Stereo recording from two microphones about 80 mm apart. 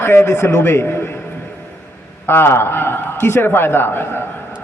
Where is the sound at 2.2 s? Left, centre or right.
Left.